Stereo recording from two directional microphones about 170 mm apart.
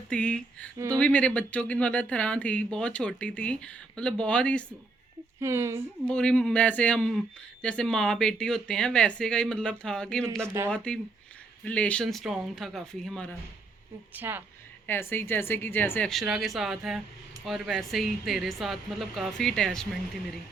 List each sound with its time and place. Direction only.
0.1 s speech: 5° left (ahead or behind)
5.4 s speech: 15° right (ahead or behind)
6.1 s speech: 5° left (ahead or behind)
14.1 s speech: 10° right (ahead or behind)
14.8 s speech: 15° left (ahead or behind)